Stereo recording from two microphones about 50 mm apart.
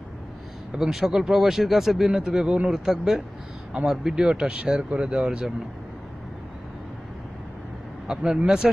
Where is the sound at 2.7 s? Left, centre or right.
Centre.